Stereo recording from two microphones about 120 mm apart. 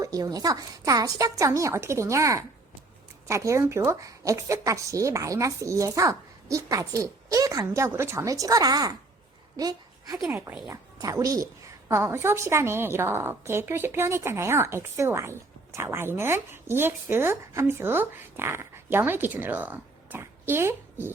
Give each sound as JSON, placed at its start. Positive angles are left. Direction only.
{"t": 0.0, "sound": "a woman's voice", "side_deg": -30}
{"t": 9.6, "sound": "a sound", "side_deg": -30}
{"t": 10.3, "sound": "a woman's voice", "side_deg": -25}